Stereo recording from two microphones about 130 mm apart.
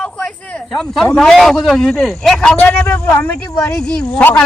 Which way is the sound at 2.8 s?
15° left (ahead or behind).